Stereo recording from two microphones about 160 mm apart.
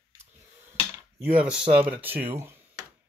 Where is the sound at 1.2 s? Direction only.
10° right (ahead or behind).